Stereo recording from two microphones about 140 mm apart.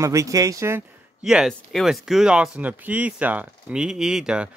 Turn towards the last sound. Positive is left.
turn(degrees=-5)  # may be behind; listen again after turning